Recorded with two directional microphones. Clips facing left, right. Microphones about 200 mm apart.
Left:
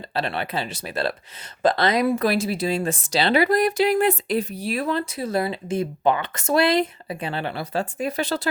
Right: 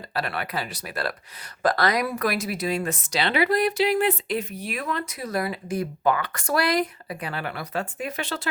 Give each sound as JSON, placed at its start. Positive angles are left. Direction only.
{"t": 0.1, "sound": "speech", "side_deg": 25}